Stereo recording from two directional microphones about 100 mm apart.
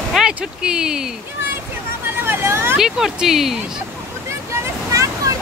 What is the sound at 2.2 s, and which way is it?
Vehicle, 20° right (ahead or behind).